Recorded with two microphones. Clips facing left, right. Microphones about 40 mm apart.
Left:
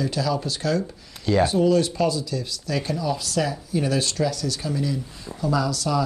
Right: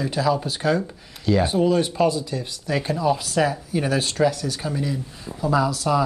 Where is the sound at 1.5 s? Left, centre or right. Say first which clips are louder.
Even; centre.